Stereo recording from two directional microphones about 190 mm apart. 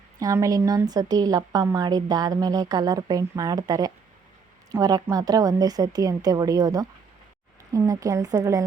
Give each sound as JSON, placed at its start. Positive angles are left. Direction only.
{"t": 0.2, "sound": "a woman's voice", "side_deg": -15}